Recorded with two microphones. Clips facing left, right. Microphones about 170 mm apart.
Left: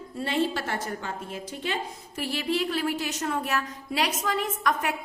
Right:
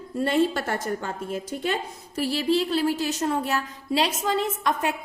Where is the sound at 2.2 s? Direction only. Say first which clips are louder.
Right 5 dB; 35° right (ahead or behind).